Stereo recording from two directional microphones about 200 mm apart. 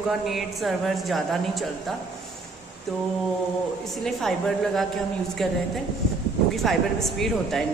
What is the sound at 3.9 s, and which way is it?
A woman's voice, centre (ahead or behind).